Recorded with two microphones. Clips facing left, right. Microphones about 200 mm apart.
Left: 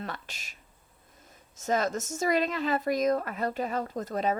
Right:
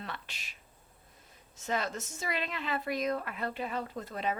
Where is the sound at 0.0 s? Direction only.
45° left (ahead or behind).